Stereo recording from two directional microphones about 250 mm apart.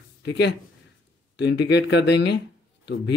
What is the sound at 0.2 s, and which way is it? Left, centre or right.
Speech, left.